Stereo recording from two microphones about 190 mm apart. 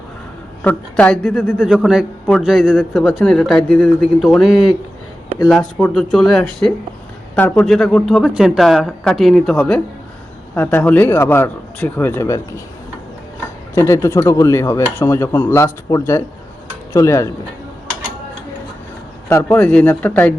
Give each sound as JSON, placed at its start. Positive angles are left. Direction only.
{"t": 0.6, "sound": "speech", "side_deg": 5}
{"t": 13.7, "sound": "speech", "side_deg": 15}
{"t": 19.3, "sound": "speech", "side_deg": 10}